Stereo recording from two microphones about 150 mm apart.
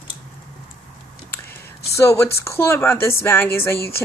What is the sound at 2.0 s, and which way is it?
A woman's voice, 20° left (ahead or behind).